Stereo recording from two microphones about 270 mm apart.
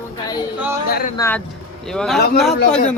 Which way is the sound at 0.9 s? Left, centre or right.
Left.